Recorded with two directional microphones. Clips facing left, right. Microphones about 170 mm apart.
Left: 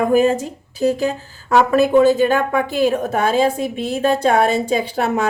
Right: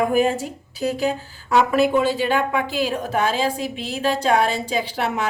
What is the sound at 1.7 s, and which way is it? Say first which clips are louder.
A woman's voice: left 6 dB; 45° left (ahead or behind).